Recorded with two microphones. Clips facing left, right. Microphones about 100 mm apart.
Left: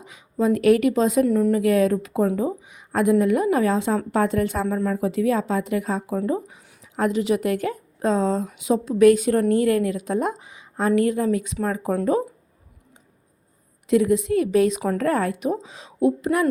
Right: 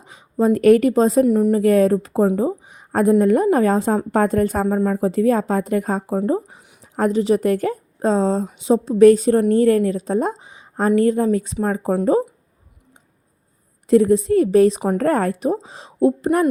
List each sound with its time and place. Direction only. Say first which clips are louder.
0.0 s speech: right 4 dB; 35° right (ahead or behind)
1.2 s speech: right 3 dB; 20° right (ahead or behind)
1.5 s a woman's voice: right 4 dB; 40° right (ahead or behind)
6.1 s a woman's voice: right 4 dB; 35° right (ahead or behind)
13.8 s a woman's voice: right 5 dB; 40° right (ahead or behind)